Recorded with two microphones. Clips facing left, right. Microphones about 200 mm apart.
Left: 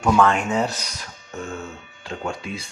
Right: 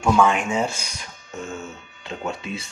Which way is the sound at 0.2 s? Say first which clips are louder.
Left 1 dB; 5° right (ahead or behind).